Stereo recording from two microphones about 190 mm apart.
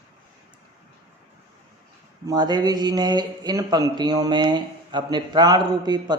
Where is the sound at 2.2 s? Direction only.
20° right (ahead or behind).